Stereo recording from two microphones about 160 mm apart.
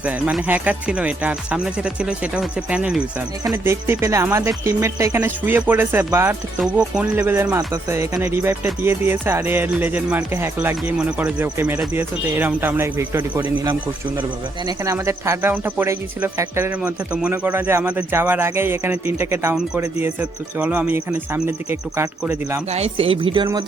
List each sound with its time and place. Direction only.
0.0 s speech: 10° right (ahead or behind)
14.2 s speech: 25° right (ahead or behind)
22.7 s speech: 40° right (ahead or behind)